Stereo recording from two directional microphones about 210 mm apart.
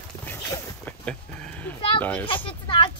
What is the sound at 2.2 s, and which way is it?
Speech, 25° left (ahead or behind).